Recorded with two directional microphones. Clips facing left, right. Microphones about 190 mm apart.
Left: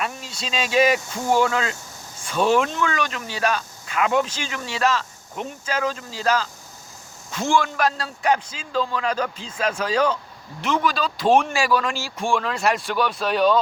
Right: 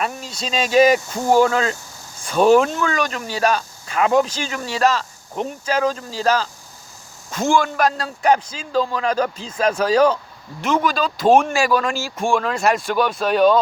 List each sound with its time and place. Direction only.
0.0 s speech: 40° right (ahead or behind)